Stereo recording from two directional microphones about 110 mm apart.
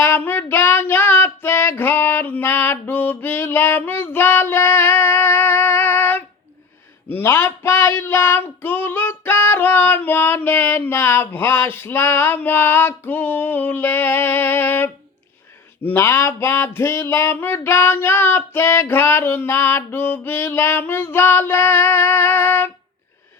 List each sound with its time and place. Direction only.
0.0 s child singing: 20° left (ahead or behind)
7.1 s female singing: 20° left (ahead or behind)
15.8 s a sound: 20° left (ahead or behind)